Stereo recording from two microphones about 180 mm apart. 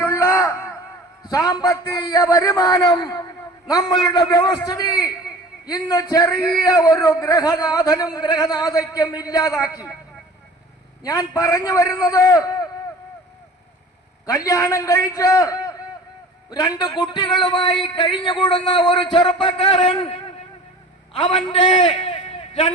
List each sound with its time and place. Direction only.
0.0 s a sound: 15° left (ahead or behind)
1.2 s a man's voice: 20° left (ahead or behind)
11.0 s a man's voice: 20° left (ahead or behind)
14.3 s a man's voice: 20° left (ahead or behind)